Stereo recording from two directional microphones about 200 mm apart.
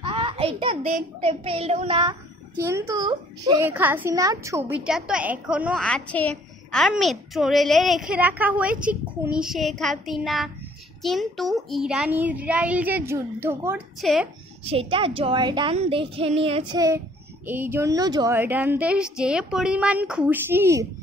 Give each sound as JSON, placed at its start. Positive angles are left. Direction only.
{"t": 0.0, "sound": "a sound", "side_deg": -25}
{"t": 1.2, "sound": "a woman's voice", "side_deg": -30}
{"t": 3.6, "sound": "a woman's voice", "side_deg": -10}
{"t": 14.0, "sound": "a woman's voice", "side_deg": 0}
{"t": 14.6, "sound": "a woman's voice", "side_deg": -30}
{"t": 16.7, "sound": "a woman's voice", "side_deg": -15}